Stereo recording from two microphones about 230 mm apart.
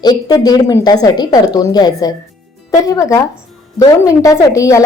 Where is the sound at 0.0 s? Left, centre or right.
Centre.